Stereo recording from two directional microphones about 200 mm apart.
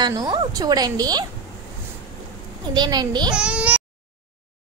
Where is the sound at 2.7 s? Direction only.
20° right (ahead or behind).